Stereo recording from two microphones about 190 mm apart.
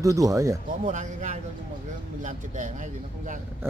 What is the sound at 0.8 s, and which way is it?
Speech, 40° right (ahead or behind).